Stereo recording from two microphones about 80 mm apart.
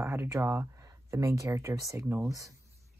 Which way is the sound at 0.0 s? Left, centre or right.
Right.